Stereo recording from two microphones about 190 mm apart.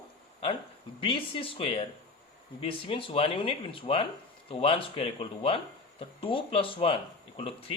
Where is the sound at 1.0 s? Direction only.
30° left (ahead or behind).